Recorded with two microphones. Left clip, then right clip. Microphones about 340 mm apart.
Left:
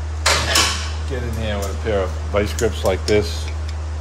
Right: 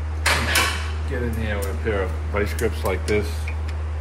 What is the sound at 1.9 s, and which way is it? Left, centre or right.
Speech, left.